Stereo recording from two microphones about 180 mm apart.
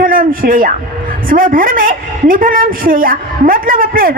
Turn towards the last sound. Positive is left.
turn(degrees=-55)  # may be behind; listen again after turning